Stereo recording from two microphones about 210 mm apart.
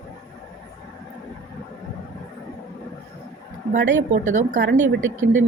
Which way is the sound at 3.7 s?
40° right (ahead or behind).